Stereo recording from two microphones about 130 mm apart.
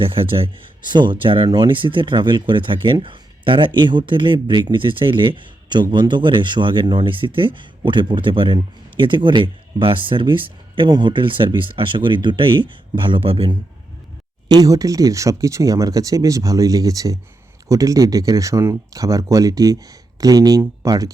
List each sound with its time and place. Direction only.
0.0 s speech: 45° right (ahead or behind)
14.4 s speech: 30° right (ahead or behind)